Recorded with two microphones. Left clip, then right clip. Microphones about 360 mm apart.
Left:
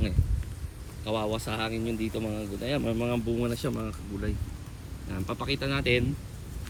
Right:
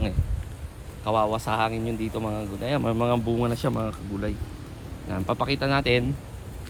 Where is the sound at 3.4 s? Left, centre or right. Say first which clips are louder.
Right 5 dB; right.